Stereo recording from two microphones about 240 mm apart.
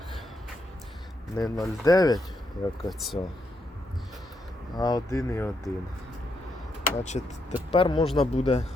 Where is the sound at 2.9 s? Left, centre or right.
Centre.